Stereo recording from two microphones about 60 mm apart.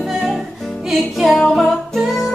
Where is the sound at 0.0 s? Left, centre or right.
Centre.